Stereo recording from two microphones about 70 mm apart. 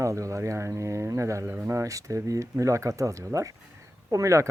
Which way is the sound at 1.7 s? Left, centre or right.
Right.